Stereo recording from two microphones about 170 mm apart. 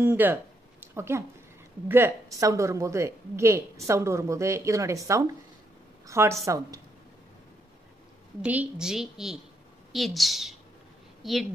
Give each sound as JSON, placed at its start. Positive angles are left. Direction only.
{"t": 0.0, "sound": "a woman's voice", "side_deg": -10}
{"t": 8.4, "sound": "a woman's voice", "side_deg": -5}